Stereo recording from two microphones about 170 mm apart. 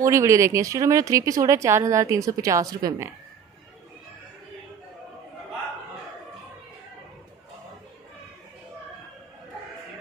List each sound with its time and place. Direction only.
0.0 s speech: 15° right (ahead or behind)